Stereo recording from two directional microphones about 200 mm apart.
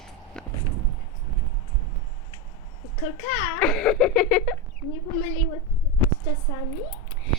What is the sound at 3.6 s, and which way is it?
Speech, centre (ahead or behind).